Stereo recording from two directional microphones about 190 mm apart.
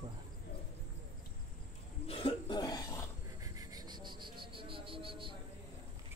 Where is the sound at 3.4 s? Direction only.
20° right (ahead or behind).